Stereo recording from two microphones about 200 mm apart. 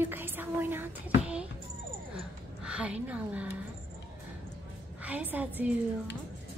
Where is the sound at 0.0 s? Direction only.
10° right (ahead or behind).